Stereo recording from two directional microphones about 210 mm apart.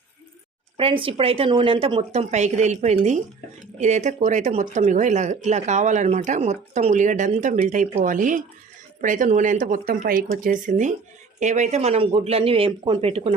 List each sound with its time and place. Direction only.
0.8 s a woman's voice: 25° right (ahead or behind)